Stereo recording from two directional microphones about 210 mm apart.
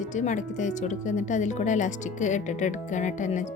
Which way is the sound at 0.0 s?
35° left (ahead or behind).